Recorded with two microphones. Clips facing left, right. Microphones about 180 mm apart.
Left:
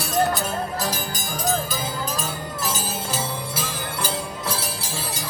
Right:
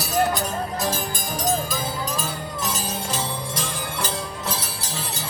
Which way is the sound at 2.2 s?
Centre (ahead or behind).